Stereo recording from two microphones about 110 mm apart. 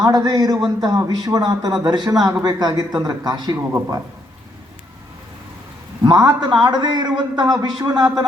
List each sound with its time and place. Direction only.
0.0 s a man's voice: 35° right (ahead or behind)
3.7 s speech: 20° right (ahead or behind)
6.0 s a man's voice: 35° right (ahead or behind)